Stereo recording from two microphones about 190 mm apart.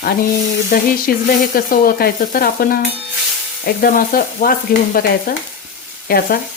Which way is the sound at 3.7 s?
50° left (ahead or behind).